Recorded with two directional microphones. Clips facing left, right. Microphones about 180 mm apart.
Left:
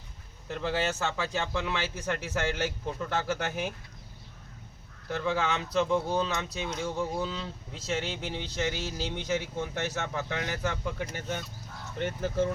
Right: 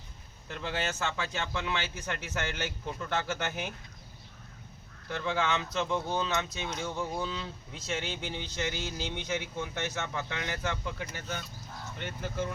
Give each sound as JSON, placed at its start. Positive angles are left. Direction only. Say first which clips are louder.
{"t": 0.4, "sound": "speech", "louder": "left 5 dB", "side_deg": 40}
{"t": 5.0, "sound": "speech", "louder": "left 2 dB", "side_deg": 40}
{"t": 11.9, "sound": "speech", "louder": "left 7 dB", "side_deg": 40}